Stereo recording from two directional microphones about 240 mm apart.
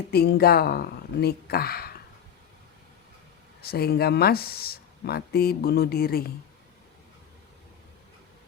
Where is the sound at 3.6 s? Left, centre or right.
Left.